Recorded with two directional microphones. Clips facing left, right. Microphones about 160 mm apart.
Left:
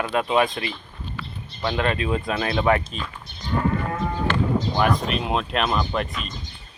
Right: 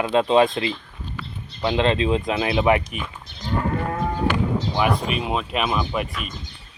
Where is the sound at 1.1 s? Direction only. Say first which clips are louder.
Even; 40° right (ahead or behind).